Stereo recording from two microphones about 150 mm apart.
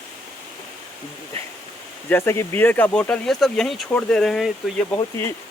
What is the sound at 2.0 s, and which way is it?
Speech, 15° left (ahead or behind).